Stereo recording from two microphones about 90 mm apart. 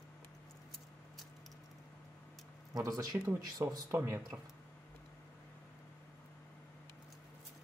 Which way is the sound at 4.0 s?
25° right (ahead or behind).